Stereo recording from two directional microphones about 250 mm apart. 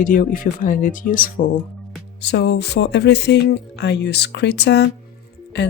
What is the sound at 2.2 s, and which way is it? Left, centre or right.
Speech, left.